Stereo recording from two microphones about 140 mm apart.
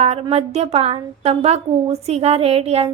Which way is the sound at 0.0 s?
45° right (ahead or behind).